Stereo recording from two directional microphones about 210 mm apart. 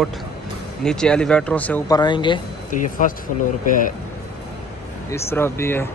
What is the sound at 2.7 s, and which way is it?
Speech, 40° left (ahead or behind).